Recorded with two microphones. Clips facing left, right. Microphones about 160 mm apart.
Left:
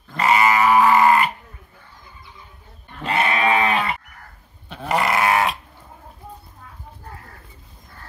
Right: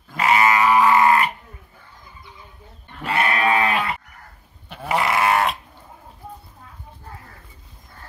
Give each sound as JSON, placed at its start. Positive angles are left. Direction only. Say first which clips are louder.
{"t": 0.1, "sound": "goat", "louder": "even", "side_deg": 0}
{"t": 3.1, "sound": "sheep", "louder": "left 1 dB", "side_deg": 20}
{"t": 4.6, "sound": "goat", "louder": "left 1 dB", "side_deg": -5}